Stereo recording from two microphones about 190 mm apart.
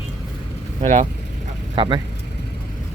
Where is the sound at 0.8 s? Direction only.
40° right (ahead or behind).